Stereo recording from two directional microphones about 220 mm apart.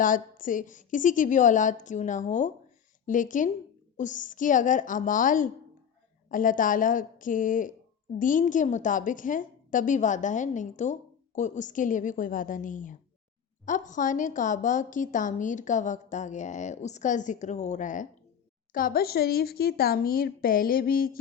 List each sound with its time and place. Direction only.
0.0 s a woman's voice: 35° left (ahead or behind)